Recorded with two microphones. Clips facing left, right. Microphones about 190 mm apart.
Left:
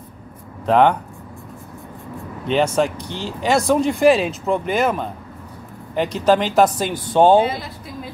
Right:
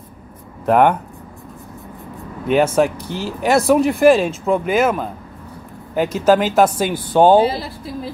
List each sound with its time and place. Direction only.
0.7 s speech: 10° right (ahead or behind)
2.4 s speech: 5° right (ahead or behind)
7.3 s speech: 30° right (ahead or behind)